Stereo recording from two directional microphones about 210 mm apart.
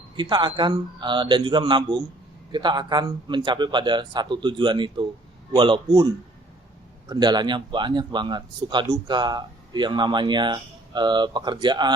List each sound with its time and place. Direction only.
0.2 s speech: 20° right (ahead or behind)
7.1 s speech: 20° right (ahead or behind)